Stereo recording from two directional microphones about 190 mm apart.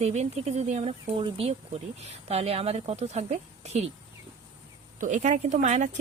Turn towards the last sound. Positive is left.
turn(degrees=-35)  # may be behind; listen again after turning